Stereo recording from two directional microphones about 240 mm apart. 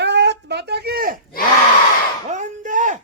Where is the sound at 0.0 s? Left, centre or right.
Right.